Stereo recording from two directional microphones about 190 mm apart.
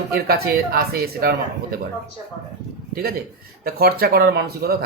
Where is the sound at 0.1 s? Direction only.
55° right (ahead or behind).